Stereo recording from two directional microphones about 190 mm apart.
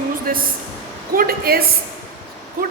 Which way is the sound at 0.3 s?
50° right (ahead or behind).